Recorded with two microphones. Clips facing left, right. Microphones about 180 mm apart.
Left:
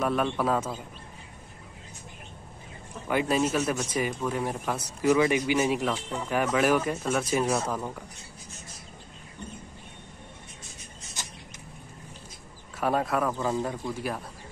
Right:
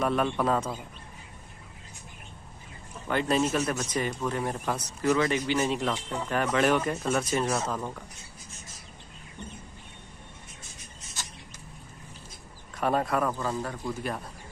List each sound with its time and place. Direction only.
0.0 s speech: centre (ahead or behind)
3.1 s speech: 5° left (ahead or behind)
12.7 s speech: centre (ahead or behind)
13.4 s speech: 15° left (ahead or behind)